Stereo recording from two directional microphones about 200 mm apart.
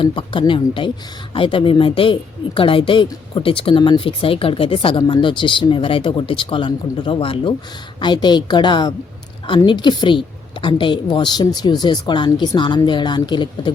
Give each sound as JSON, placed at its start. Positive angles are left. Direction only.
{"t": 0.0, "sound": "a woman's voice", "side_deg": 25}